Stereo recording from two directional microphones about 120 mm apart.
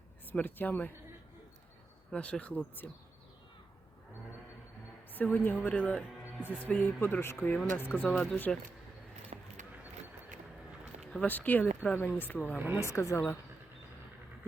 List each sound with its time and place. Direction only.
0.3 s speech: 15° left (ahead or behind)
2.0 s speech: 10° left (ahead or behind)
5.1 s speech: 15° left (ahead or behind)
9.3 s a sound: 75° right (ahead or behind)
11.1 s speech: 15° left (ahead or behind)
12.5 s speech: 15° right (ahead or behind)
12.8 s speech: 25° left (ahead or behind)